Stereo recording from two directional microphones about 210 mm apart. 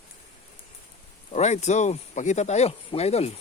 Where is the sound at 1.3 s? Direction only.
30° left (ahead or behind).